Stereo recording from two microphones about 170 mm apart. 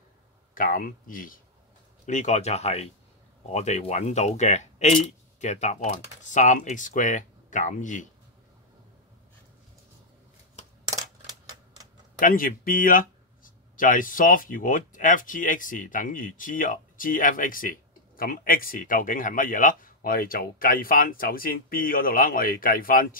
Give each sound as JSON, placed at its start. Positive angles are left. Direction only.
{"t": 0.6, "sound": "speech", "side_deg": 55}
{"t": 12.2, "sound": "speech", "side_deg": 55}